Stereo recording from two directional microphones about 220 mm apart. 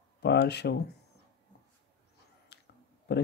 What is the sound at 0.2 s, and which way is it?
Speech, 50° left (ahead or behind).